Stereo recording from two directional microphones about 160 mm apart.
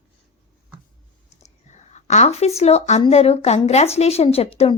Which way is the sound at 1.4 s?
45° left (ahead or behind).